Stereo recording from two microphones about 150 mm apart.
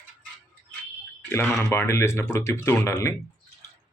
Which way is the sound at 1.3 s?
15° left (ahead or behind).